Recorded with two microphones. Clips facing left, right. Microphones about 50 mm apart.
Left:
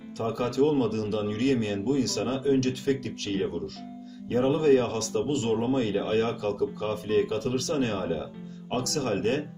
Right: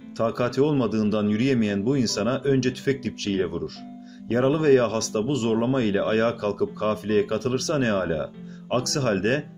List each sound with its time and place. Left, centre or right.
0.2 s speech: right